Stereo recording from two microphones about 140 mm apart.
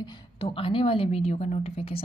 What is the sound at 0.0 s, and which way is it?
A woman's voice, 35° left (ahead or behind).